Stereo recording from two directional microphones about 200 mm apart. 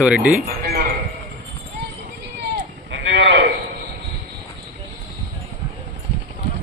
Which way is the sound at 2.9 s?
60° right (ahead or behind).